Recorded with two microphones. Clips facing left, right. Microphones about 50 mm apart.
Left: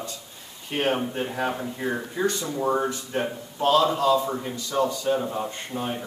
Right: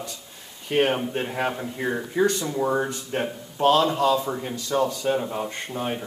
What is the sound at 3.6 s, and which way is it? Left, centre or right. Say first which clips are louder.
Speech: right 1 dB; right.